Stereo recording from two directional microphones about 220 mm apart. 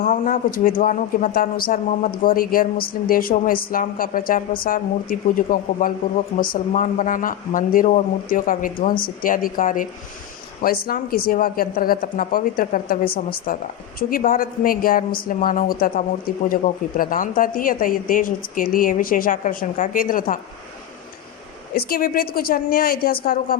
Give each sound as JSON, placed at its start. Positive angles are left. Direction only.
{"t": 0.0, "sound": "a woman's voice", "side_deg": 40}
{"t": 21.8, "sound": "a woman's voice", "side_deg": 45}